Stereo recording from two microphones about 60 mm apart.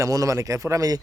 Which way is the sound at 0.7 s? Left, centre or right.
Right.